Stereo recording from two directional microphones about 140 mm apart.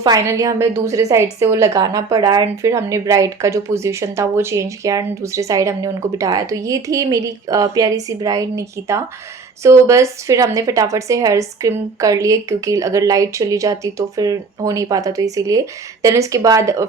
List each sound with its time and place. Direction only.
0.0 s a woman's voice: 25° right (ahead or behind)